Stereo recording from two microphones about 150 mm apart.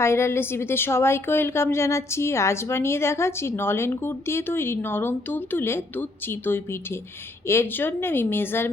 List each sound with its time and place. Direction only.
0.0 s a woman's voice: 15° left (ahead or behind)